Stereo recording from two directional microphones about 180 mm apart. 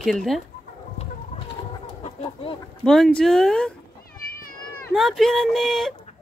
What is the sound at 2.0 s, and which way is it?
Chicken, 35° left (ahead or behind).